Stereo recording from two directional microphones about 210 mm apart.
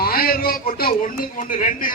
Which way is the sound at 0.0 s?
45° left (ahead or behind).